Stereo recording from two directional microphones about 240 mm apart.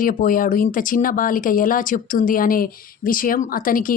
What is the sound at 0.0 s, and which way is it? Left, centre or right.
Speech, left.